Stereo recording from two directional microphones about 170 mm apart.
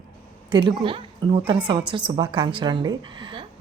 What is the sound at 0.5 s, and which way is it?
Speech, 25° right (ahead or behind).